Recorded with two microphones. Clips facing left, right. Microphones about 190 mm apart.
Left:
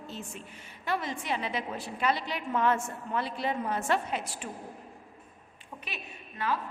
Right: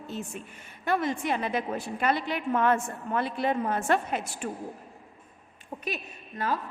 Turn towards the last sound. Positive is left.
turn(degrees=-40)  # may be behind; listen again after turning